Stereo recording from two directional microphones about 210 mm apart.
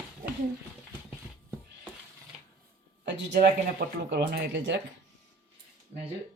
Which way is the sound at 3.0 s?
55° right (ahead or behind).